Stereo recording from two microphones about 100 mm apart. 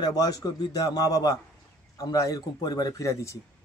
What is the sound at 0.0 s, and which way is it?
Speech, 40° left (ahead or behind).